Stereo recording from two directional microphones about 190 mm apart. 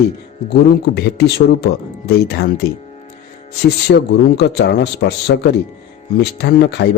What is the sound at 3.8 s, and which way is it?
A man's voice, 65° left (ahead or behind).